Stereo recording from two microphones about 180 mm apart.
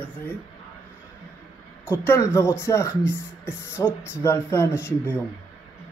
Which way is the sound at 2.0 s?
15° left (ahead or behind).